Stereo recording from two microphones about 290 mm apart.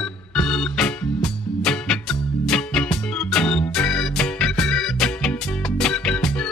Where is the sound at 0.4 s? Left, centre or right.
Centre.